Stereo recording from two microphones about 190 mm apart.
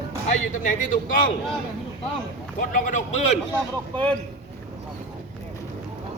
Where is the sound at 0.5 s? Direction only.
40° left (ahead or behind).